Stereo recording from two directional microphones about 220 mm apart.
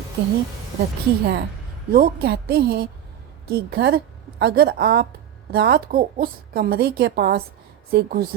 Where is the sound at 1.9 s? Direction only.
45° right (ahead or behind).